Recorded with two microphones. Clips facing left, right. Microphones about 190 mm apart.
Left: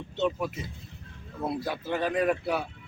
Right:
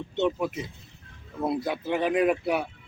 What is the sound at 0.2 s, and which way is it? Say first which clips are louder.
Speech: right 3 dB; 15° right (ahead or behind).